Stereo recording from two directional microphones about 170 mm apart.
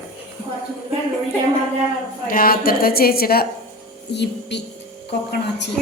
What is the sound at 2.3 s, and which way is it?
A woman's voice, 60° left (ahead or behind).